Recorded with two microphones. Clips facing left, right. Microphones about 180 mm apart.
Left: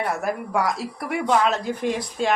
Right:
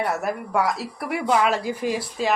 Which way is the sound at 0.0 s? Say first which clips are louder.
Even; centre (ahead or behind).